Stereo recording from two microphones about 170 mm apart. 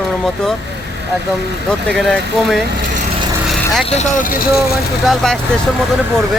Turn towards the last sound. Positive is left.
turn(degrees=5)  # may be behind; listen again after turning